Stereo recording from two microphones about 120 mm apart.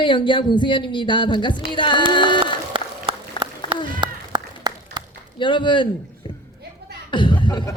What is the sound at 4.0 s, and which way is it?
Run, 40° right (ahead or behind).